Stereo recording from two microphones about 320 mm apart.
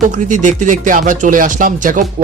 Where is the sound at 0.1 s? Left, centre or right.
Right.